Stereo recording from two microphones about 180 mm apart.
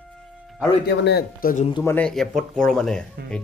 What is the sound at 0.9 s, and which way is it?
Speech, 65° left (ahead or behind).